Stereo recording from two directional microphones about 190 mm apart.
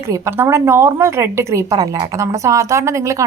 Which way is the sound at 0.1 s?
15° right (ahead or behind).